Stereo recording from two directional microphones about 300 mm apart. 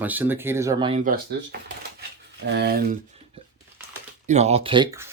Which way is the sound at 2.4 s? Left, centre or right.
Right.